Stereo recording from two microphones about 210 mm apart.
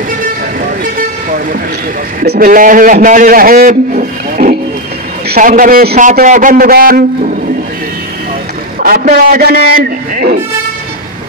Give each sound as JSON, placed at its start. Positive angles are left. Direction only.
{"t": 2.2, "sound": "a man's voice", "side_deg": -45}
{"t": 8.8, "sound": "a man's voice", "side_deg": -45}